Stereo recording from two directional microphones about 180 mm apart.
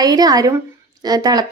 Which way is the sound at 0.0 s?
20° right (ahead or behind).